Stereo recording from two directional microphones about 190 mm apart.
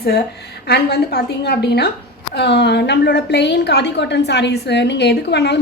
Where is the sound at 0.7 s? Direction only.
55° left (ahead or behind).